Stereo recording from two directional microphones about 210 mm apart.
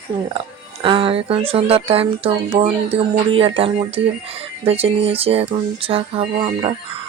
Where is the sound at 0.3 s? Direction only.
25° right (ahead or behind).